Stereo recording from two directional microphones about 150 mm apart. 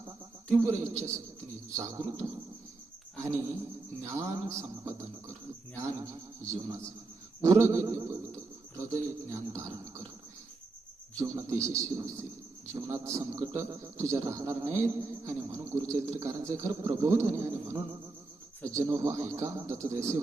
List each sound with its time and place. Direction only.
0.5 s a man's voice: 20° right (ahead or behind)
4.0 s a man's voice: 20° right (ahead or behind)
11.2 s a man's voice: 20° right (ahead or behind)